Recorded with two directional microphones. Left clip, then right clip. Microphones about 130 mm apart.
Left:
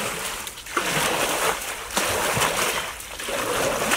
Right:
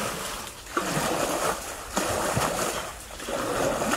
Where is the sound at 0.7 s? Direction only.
15° left (ahead or behind).